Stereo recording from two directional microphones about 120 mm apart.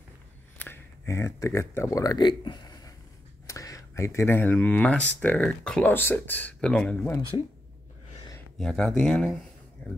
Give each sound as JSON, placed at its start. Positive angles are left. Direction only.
{"t": 0.6, "sound": "speech", "side_deg": 20}
{"t": 7.3, "sound": "speech", "side_deg": 40}
{"t": 8.5, "sound": "speech", "side_deg": 5}